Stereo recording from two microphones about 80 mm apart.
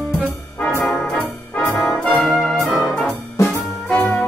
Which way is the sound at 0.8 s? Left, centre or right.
Centre.